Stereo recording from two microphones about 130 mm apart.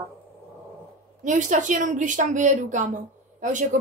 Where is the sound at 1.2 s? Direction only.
75° right (ahead or behind).